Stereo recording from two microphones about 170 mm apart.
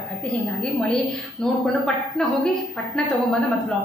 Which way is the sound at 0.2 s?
5° left (ahead or behind).